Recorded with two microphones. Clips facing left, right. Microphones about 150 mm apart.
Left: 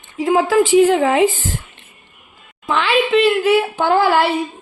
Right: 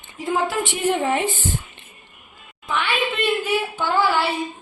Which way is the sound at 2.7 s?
90° left.